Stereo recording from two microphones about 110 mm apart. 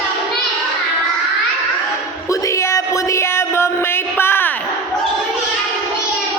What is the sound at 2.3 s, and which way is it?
Music, 30° left (ahead or behind).